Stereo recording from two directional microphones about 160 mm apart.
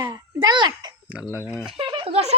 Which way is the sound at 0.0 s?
25° right (ahead or behind).